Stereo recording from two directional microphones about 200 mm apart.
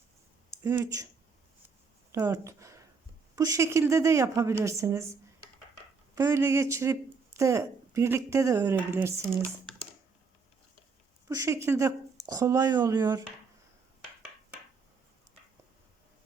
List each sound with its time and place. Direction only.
0.5 s speech: 10° right (ahead or behind)
2.1 s speech: 15° right (ahead or behind)
11.3 s speech: 15° right (ahead or behind)